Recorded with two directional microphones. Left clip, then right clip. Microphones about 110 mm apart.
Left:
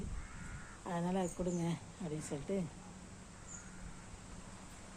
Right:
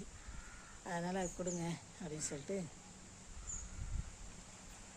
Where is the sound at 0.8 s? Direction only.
10° right (ahead or behind).